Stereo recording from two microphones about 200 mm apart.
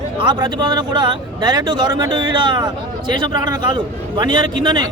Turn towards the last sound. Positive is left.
turn(degrees=-20)  # may be behind; listen again after turning